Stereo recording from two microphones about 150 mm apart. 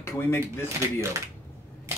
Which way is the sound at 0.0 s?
15° left (ahead or behind).